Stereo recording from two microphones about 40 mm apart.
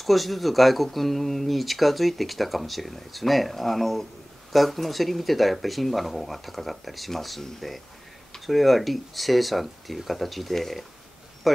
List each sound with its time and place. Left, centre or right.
0.0 s speech: centre